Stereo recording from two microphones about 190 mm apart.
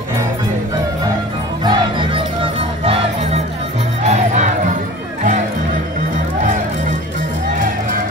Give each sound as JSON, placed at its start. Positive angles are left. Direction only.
{"t": 1.6, "sound": "music", "side_deg": -25}
{"t": 4.0, "sound": "music", "side_deg": -35}